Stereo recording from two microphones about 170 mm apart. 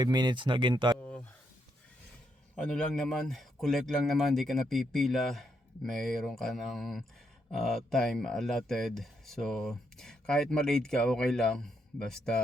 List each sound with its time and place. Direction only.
0.0 s speech: 25° right (ahead or behind)
1.0 s a sound: 5° left (ahead or behind)
2.6 s speech: 5° left (ahead or behind)